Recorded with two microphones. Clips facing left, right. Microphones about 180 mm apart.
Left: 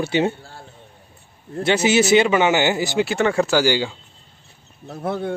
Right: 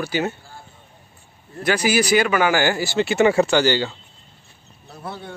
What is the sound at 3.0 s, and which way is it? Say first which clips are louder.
Speech: right 3 dB; 5° right (ahead or behind).